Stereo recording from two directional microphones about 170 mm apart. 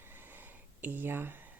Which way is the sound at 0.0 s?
10° right (ahead or behind).